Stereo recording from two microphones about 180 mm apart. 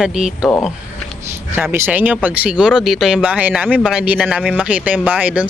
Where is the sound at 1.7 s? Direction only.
10° right (ahead or behind).